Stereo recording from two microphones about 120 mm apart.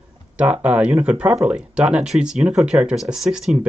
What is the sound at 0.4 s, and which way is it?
Speech, 10° right (ahead or behind).